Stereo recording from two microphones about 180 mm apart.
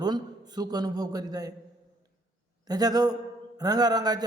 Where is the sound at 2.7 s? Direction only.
20° right (ahead or behind).